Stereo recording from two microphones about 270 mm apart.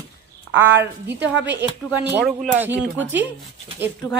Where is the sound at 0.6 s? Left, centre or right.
Centre.